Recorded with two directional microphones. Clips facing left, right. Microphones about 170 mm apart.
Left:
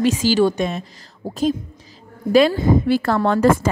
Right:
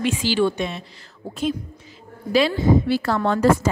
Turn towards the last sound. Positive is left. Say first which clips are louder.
# left 2 dB
turn(degrees=55)  # may be behind; listen again after turning